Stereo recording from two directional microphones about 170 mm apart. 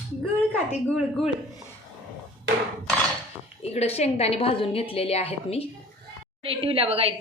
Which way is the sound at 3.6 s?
35° left (ahead or behind).